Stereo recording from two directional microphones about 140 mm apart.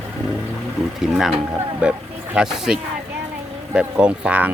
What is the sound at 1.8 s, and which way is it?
Speech, 10° right (ahead or behind).